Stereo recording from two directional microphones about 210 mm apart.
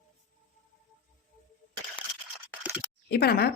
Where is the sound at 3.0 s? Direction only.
50° left (ahead or behind).